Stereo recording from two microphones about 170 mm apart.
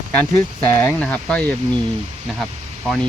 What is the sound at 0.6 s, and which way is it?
Speech, 10° left (ahead or behind).